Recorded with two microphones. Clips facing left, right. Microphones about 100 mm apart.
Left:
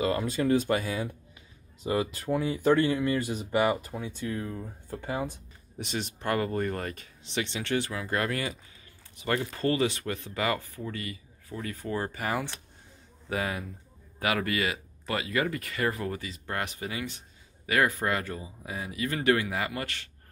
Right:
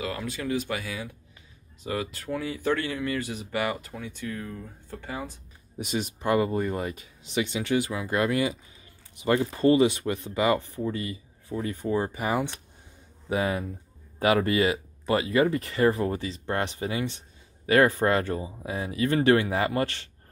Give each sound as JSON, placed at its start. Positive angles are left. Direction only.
{"t": 0.0, "sound": "speech", "side_deg": 30}
{"t": 1.8, "sound": "speech", "side_deg": 25}
{"t": 5.8, "sound": "speech", "side_deg": -10}